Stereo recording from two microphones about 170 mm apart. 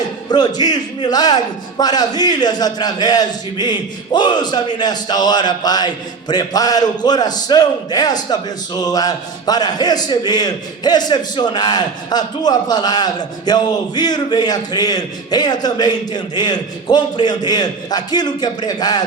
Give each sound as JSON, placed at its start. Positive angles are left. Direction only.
{"t": 0.3, "sound": "a man's voice", "side_deg": 25}